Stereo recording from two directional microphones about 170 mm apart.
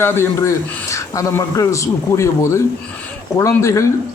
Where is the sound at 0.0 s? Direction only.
15° left (ahead or behind).